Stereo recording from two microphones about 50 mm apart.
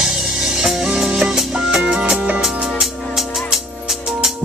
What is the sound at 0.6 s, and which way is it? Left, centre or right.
Music, centre.